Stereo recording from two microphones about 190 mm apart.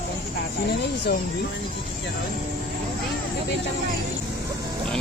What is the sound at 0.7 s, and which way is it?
Speech, 60° left (ahead or behind).